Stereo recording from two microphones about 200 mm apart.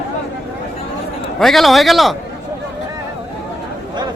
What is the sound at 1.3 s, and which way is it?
Speech, centre (ahead or behind).